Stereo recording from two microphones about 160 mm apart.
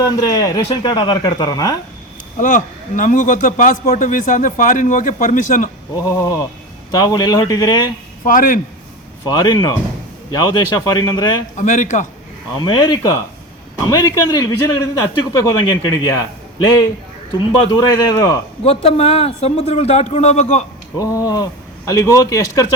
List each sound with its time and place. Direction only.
0.0 s speech: 20° left (ahead or behind)
2.4 s a man's voice: 55° left (ahead or behind)
6.0 s speech: 20° left (ahead or behind)
8.2 s a man's voice: 60° left (ahead or behind)
9.2 s speech: 25° left (ahead or behind)
11.5 s speech: 50° left (ahead or behind)
12.5 s speech: 25° left (ahead or behind)
17.7 s speech: 20° left (ahead or behind)
18.6 s a man's voice: 40° left (ahead or behind)
21.0 s speech: 20° left (ahead or behind)